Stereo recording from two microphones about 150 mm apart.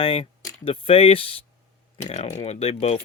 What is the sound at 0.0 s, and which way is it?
Speech, 35° left (ahead or behind).